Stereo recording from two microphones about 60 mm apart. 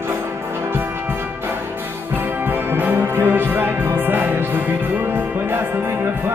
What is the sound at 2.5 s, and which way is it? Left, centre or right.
Music, right.